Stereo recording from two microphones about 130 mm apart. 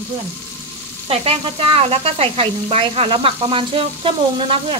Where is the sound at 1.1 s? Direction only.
50° right (ahead or behind).